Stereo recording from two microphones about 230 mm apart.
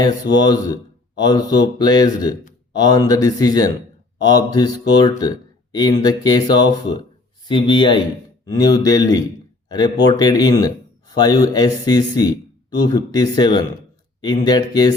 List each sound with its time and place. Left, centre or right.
0.0 s speech: centre